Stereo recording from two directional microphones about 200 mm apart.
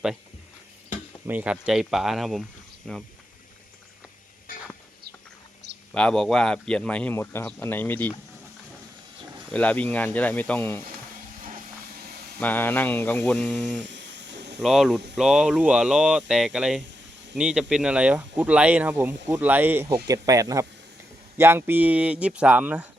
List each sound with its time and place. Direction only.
1.3 s speech: 5° right (ahead or behind)
4.5 s a sound: 45° left (ahead or behind)
5.9 s speech: 5° left (ahead or behind)
9.5 s speech: 5° left (ahead or behind)
12.4 s speech: 10° left (ahead or behind)
13.8 s snake: 60° right (ahead or behind)
14.6 s speech: centre (ahead or behind)